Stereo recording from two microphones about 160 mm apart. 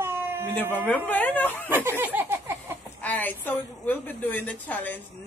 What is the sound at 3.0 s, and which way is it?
A woman's voice, 10° left (ahead or behind).